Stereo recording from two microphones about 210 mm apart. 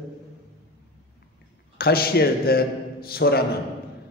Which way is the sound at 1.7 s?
45° left (ahead or behind).